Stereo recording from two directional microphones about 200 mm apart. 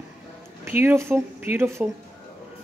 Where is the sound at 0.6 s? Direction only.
10° right (ahead or behind).